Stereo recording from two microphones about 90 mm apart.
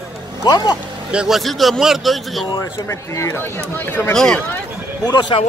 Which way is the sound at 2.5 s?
55° left (ahead or behind).